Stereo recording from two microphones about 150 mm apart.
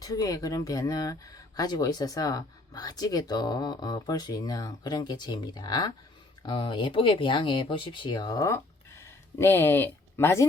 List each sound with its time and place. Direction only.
0.0 s speech: 25° left (ahead or behind)